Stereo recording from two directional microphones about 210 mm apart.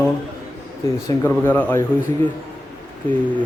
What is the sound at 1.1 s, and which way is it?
Speech, 10° left (ahead or behind).